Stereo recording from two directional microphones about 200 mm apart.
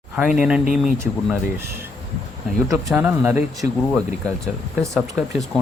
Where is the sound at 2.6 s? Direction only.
10° right (ahead or behind).